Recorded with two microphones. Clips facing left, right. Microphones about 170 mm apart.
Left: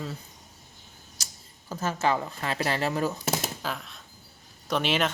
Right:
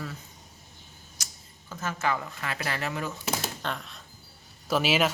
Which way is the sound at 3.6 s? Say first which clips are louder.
Even; centre (ahead or behind).